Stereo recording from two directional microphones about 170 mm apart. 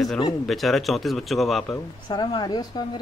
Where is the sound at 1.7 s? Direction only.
25° left (ahead or behind).